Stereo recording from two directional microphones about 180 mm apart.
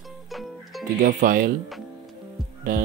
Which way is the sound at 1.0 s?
50° right (ahead or behind).